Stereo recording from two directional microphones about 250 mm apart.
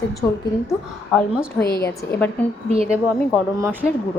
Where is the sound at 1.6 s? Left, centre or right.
Left.